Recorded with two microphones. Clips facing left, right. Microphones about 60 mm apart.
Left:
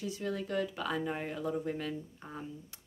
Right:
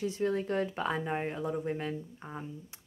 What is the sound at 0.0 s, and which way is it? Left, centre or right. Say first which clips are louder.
Speech: right 5 dB; right.